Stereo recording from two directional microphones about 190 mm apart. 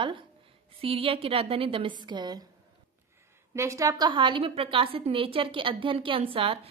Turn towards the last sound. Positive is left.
turn(degrees=-30)  # may be behind; listen again after turning